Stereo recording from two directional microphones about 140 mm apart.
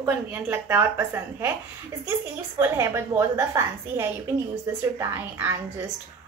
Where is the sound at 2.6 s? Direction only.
20° right (ahead or behind).